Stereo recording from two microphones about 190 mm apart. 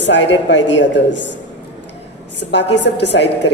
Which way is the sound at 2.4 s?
65° left (ahead or behind).